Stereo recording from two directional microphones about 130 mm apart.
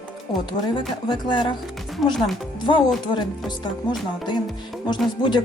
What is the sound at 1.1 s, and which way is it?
Speech, 40° left (ahead or behind).